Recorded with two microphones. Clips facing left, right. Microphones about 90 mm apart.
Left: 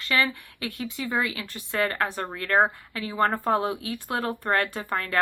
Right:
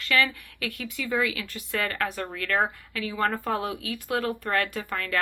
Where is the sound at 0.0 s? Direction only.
25° left (ahead or behind).